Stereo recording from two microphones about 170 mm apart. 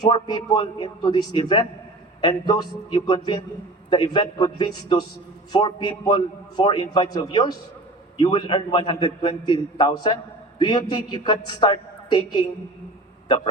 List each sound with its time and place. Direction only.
0.0 s a man's voice: 25° left (ahead or behind)